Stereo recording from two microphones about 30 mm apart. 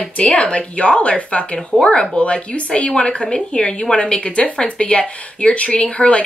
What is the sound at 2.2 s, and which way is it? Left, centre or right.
A woman's voice, left.